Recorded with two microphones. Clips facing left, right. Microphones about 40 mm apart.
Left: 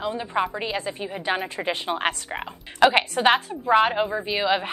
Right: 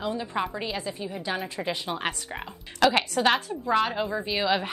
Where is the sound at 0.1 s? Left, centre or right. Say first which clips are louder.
Left 4 dB; left.